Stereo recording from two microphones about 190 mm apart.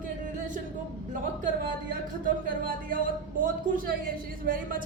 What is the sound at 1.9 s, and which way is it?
Speech, 50° right (ahead or behind).